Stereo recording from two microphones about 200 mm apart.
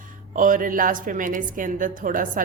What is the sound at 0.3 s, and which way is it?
A woman's voice, 40° right (ahead or behind).